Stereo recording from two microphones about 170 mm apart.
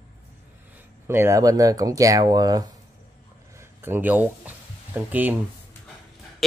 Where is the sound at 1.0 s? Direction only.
15° right (ahead or behind).